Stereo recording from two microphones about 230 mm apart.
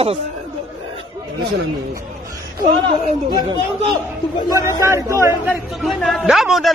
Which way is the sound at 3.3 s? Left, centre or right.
Centre.